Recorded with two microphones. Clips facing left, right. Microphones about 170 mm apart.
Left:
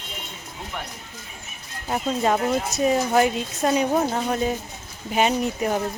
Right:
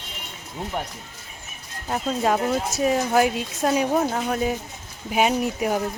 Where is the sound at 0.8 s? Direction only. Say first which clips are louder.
Right 5 dB; 40° right (ahead or behind).